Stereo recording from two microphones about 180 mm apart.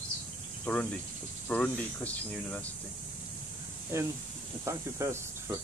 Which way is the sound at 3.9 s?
15° right (ahead or behind).